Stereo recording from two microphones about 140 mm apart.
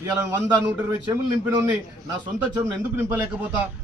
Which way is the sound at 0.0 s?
20° right (ahead or behind).